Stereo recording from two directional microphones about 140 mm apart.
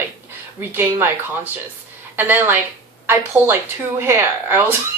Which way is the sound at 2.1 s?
15° right (ahead or behind).